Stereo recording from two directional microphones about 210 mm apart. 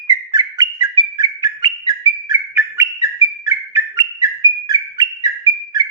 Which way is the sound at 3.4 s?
15° right (ahead or behind).